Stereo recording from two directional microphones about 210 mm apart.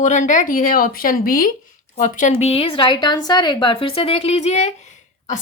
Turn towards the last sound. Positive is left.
turn(degrees=35)  # may be behind; listen again after turning